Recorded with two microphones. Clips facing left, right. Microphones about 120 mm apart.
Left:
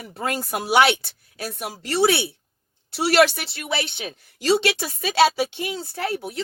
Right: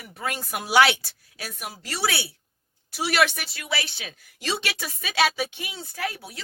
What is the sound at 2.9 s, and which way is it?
A woman's voice, 35° left (ahead or behind).